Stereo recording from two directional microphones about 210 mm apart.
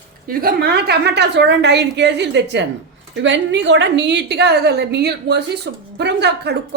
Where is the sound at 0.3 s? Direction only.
45° right (ahead or behind).